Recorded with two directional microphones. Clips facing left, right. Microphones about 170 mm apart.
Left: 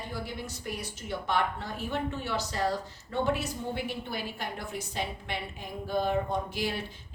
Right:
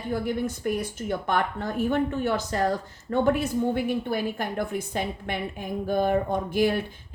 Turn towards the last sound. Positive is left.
turn(degrees=-50)  # may be behind; listen again after turning